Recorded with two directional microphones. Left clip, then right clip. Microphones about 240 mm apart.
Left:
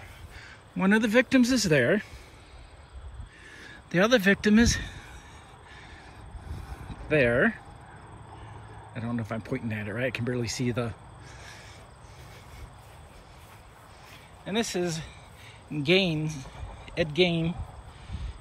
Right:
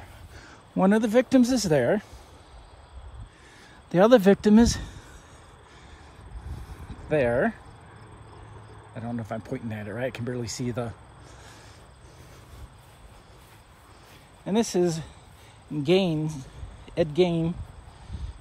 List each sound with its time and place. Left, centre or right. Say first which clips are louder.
0.4 s a sound: right 7 dB; right
0.8 s speech: right 1 dB; centre
3.5 s speech: right 4 dB; centre
7.1 s speech: even; centre
8.9 s speech: even; centre
14.4 s speech: right 5 dB; centre